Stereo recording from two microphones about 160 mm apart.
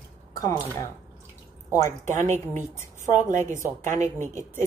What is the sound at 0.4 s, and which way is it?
Speech, 20° left (ahead or behind).